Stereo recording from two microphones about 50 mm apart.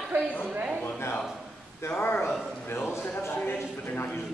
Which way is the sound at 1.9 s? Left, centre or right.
Left.